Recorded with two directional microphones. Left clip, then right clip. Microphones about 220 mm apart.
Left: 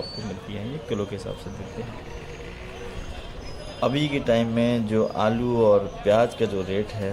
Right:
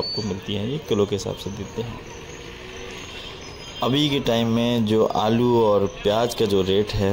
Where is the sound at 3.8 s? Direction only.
20° right (ahead or behind).